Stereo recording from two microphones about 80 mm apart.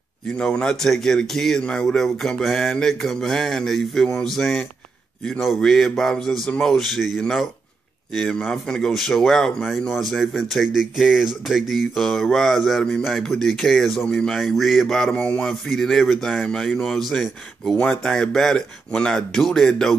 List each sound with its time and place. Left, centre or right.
0.4 s speech: centre
15.1 s speech: centre
15.7 s speech: centre